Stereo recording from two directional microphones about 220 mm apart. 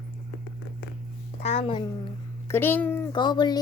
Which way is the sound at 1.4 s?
30° left (ahead or behind).